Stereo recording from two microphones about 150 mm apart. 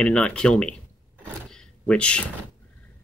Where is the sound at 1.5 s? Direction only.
5° left (ahead or behind).